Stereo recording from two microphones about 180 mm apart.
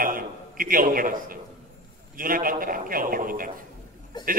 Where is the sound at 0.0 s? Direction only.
50° right (ahead or behind).